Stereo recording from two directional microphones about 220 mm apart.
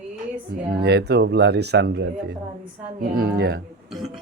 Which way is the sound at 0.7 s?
45° right (ahead or behind).